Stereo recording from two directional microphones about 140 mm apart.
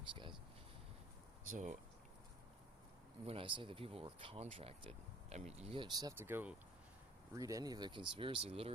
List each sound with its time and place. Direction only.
1.5 s speech: 65° right (ahead or behind)
3.2 s speech: 40° right (ahead or behind)
6.1 s speech: 15° right (ahead or behind)
7.3 s speech: 25° right (ahead or behind); by 8.7 s 45° right (ahead or behind)